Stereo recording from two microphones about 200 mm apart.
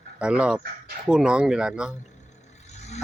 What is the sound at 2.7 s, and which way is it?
Vehicle, 35° left (ahead or behind).